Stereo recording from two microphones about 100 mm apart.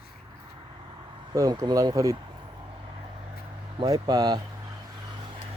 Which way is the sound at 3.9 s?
40° right (ahead or behind).